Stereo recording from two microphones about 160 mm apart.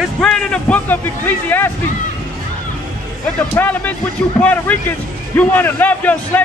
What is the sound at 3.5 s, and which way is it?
A man's voice, 10° left (ahead or behind).